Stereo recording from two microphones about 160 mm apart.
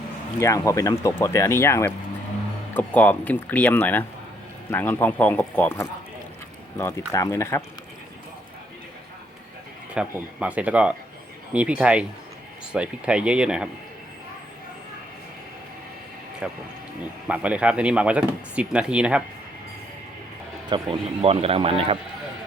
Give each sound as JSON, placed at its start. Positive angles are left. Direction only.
{"t": 0.3, "sound": "speech", "side_deg": 20}
{"t": 9.9, "sound": "speech", "side_deg": -5}
{"t": 16.4, "sound": "speech", "side_deg": -5}
{"t": 20.7, "sound": "speech", "side_deg": -35}